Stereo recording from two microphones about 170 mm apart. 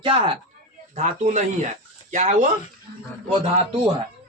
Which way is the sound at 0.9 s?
45° right (ahead or behind).